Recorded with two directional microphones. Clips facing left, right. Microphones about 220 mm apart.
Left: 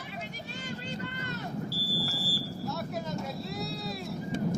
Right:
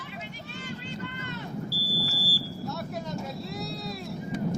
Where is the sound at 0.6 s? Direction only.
40° left (ahead or behind).